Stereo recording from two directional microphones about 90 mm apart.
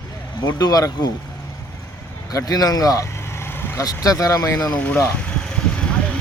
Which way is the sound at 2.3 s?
45° left (ahead or behind).